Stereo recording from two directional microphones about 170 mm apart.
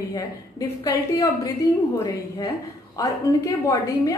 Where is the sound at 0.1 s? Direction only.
20° left (ahead or behind).